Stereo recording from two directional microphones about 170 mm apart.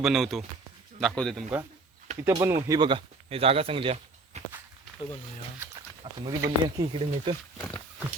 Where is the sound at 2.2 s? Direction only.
15° right (ahead or behind); by 4.4 s 35° right (ahead or behind).